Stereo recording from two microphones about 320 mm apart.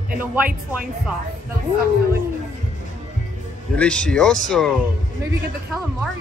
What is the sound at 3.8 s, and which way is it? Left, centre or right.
Speech, centre.